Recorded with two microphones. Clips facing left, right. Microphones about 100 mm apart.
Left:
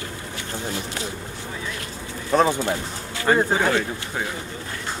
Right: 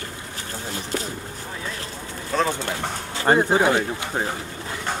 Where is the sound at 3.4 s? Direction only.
15° right (ahead or behind).